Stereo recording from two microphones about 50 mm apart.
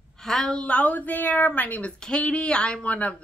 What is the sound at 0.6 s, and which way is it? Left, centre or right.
Speech, left.